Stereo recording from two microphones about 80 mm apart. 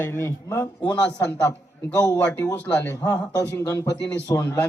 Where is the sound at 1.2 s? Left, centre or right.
Left.